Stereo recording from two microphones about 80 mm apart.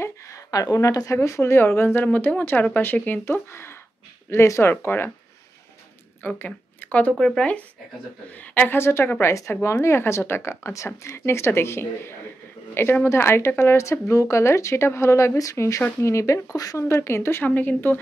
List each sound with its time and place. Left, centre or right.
0.0 s a woman's voice: left
6.2 s speech: left
7.2 s speech: centre
8.4 s a woman's voice: left